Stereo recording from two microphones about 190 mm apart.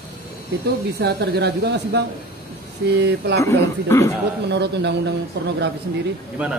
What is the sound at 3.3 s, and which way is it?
Speech, 15° left (ahead or behind).